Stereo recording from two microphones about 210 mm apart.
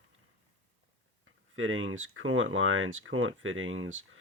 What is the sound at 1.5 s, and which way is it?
Speech, 70° right (ahead or behind).